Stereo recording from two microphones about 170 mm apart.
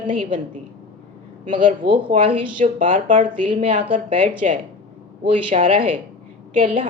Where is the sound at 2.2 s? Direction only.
30° right (ahead or behind).